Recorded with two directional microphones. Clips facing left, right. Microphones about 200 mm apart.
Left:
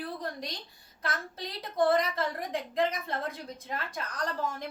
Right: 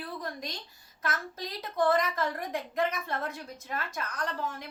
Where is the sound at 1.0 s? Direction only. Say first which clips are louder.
Right 1 dB; 30° left (ahead or behind).